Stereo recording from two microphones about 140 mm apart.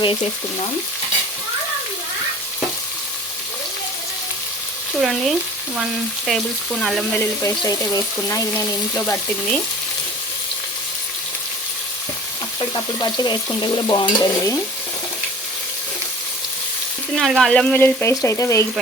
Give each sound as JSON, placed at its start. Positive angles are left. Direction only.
{"t": 4.9, "sound": "frying", "side_deg": 0}
{"t": 7.2, "sound": "frying", "side_deg": 25}
{"t": 12.5, "sound": "stir", "side_deg": 30}
{"t": 17.2, "sound": "frying", "side_deg": 0}